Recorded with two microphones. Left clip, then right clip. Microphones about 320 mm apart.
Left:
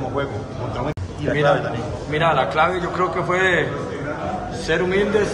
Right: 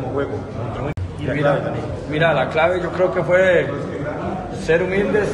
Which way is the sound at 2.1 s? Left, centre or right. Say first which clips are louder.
Right 1 dB; centre.